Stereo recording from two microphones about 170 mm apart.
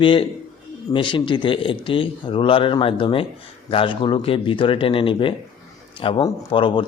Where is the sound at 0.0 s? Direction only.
30° left (ahead or behind).